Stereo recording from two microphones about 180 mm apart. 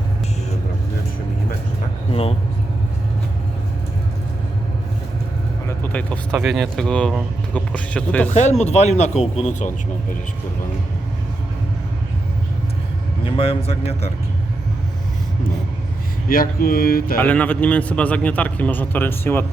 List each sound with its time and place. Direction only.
5.6 s speech: 10° left (ahead or behind)
8.3 s speech: 40° left (ahead or behind)
13.2 s speech: 30° left (ahead or behind)
16.3 s speech: 55° left (ahead or behind)
17.2 s a man's voice: 5° left (ahead or behind)